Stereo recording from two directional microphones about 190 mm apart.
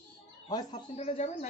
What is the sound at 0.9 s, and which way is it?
Speech, 35° left (ahead or behind).